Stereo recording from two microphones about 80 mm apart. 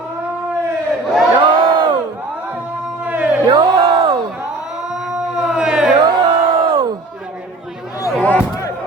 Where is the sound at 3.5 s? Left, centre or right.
Right.